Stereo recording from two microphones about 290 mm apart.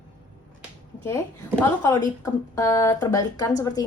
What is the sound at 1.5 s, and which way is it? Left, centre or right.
Speech, centre.